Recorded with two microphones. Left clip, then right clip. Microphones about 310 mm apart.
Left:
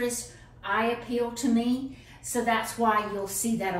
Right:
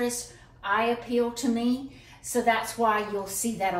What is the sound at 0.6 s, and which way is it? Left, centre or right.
A woman's voice, centre.